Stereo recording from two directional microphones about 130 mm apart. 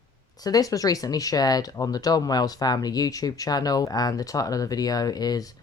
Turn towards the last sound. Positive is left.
turn(degrees=30)  # may be behind; listen again after turning